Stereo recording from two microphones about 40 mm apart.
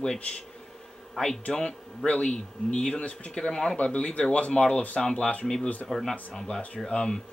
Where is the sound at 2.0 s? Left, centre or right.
Left.